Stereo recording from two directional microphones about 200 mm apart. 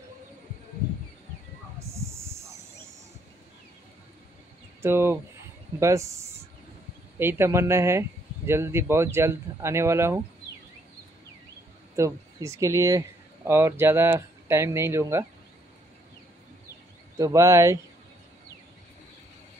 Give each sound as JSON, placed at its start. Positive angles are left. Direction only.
{"t": 2.0, "sound": "snake", "side_deg": -15}
{"t": 4.8, "sound": "speech", "side_deg": -10}
{"t": 12.0, "sound": "speech", "side_deg": -15}
{"t": 17.2, "sound": "speech", "side_deg": -15}